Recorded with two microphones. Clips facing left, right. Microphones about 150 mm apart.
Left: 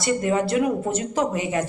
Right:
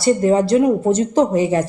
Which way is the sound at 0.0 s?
30° right (ahead or behind).